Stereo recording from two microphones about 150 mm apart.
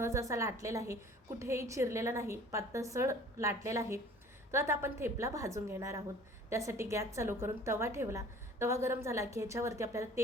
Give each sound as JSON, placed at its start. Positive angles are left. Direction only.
{"t": 0.0, "sound": "a woman's voice", "side_deg": -20}